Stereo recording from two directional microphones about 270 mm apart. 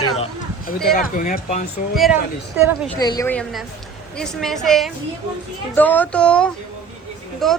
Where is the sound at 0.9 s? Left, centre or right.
Left.